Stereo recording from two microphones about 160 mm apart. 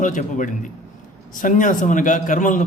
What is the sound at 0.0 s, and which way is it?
A man's voice, 50° left (ahead or behind).